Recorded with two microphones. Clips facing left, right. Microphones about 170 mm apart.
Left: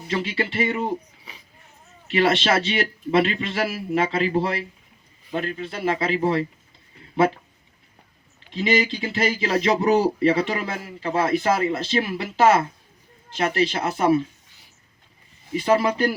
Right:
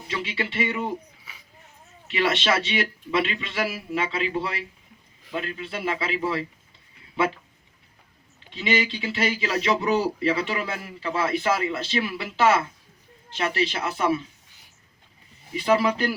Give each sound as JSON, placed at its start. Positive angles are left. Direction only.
{"t": 0.1, "sound": "a man's voice", "side_deg": 40}
{"t": 8.5, "sound": "speech", "side_deg": 40}
{"t": 15.5, "sound": "speech", "side_deg": 40}